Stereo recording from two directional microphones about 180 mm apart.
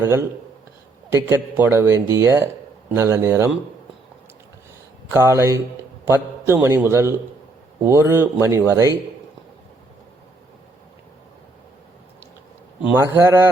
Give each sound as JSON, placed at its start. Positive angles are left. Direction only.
{"t": 0.0, "sound": "speech", "side_deg": -15}
{"t": 5.1, "sound": "speech", "side_deg": -15}
{"t": 13.0, "sound": "speech", "side_deg": -10}